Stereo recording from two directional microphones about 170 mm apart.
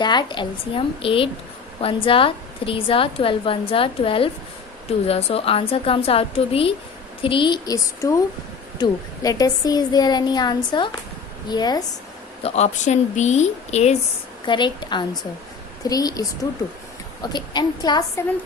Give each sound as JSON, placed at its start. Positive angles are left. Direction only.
{"t": 0.0, "sound": "a woman's voice", "side_deg": 25}
{"t": 12.4, "sound": "a woman's voice", "side_deg": 40}
{"t": 14.4, "sound": "a woman's voice", "side_deg": 25}